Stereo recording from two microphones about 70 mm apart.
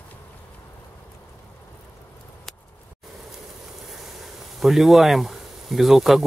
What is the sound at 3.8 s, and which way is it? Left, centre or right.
Speech, centre.